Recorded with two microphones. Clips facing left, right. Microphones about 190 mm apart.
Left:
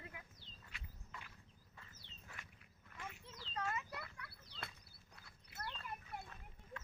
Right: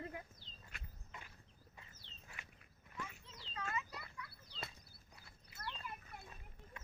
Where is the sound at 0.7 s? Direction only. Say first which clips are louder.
Right 1 dB; 50° right (ahead or behind).